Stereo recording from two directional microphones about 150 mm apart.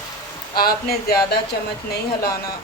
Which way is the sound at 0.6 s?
90° left.